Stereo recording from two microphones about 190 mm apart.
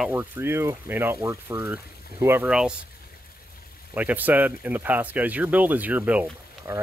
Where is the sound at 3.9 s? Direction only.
10° right (ahead or behind).